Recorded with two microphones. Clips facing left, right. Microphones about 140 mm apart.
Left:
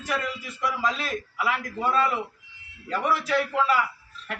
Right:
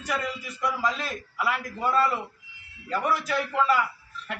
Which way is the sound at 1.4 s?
5° right (ahead or behind).